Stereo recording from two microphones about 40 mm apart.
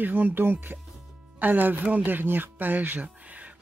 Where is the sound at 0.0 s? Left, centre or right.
Right.